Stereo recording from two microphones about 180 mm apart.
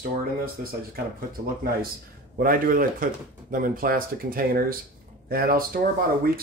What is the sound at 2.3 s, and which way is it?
Speech, 50° right (ahead or behind).